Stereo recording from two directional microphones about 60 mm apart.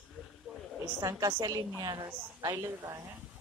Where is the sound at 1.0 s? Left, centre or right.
Right.